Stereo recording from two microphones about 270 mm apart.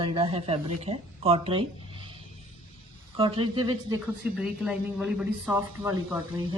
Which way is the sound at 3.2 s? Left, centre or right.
Centre.